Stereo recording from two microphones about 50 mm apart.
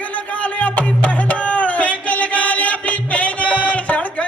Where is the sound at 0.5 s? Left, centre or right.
Left.